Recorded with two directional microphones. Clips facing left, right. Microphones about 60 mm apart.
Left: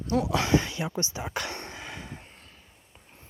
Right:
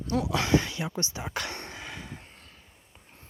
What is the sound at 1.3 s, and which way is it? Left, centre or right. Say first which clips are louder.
Cough: left 1 dB; centre.